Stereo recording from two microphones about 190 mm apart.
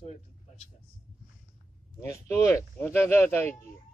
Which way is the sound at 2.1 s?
15° left (ahead or behind).